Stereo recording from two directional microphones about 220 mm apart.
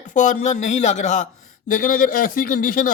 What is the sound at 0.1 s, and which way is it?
Speech, 35° left (ahead or behind).